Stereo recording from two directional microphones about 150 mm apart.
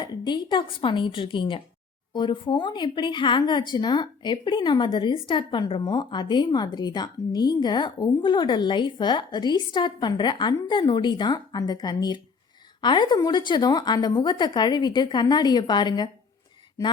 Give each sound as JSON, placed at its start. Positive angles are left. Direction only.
{"t": 0.0, "sound": "a woman's voice", "side_deg": 30}